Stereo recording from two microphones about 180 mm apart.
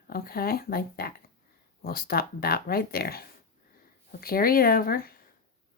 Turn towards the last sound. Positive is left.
turn(degrees=55)  # may be behind; listen again after turning